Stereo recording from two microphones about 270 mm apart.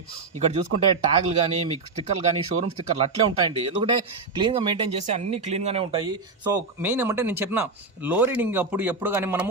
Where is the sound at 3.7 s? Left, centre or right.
Centre.